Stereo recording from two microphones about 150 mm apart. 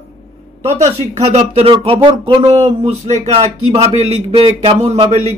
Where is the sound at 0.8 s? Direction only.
45° right (ahead or behind).